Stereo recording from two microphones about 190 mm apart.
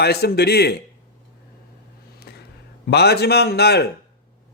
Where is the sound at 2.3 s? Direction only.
60° left (ahead or behind).